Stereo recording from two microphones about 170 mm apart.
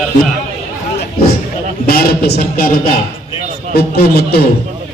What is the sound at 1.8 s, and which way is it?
Speech, 65° left (ahead or behind).